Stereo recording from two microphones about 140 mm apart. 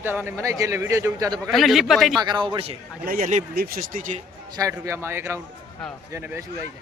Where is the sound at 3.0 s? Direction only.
80° right.